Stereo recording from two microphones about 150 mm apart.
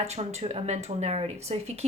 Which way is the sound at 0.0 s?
45° right (ahead or behind).